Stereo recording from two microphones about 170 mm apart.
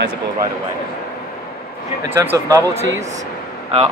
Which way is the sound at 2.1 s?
15° right (ahead or behind).